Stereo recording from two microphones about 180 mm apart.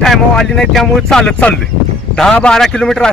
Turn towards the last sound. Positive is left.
turn(degrees=5)  # may be behind; listen again after turning